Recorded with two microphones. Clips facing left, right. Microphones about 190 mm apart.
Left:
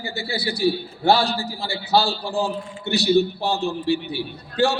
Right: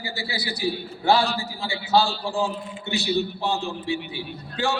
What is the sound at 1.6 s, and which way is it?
A man's voice, 65° left (ahead or behind).